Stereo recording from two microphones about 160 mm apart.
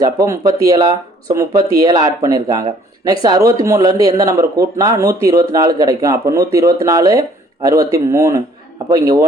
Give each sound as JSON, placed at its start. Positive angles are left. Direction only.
{"t": 0.0, "sound": "speech", "side_deg": -20}